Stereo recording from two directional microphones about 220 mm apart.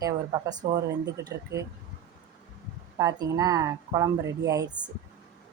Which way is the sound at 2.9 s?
15° right (ahead or behind).